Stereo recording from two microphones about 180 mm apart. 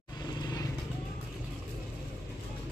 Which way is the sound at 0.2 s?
20° left (ahead or behind).